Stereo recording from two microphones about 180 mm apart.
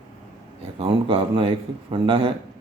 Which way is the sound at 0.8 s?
30° right (ahead or behind).